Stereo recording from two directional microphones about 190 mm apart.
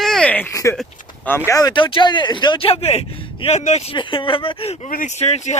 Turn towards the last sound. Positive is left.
turn(degrees=35)  # may be behind; listen again after turning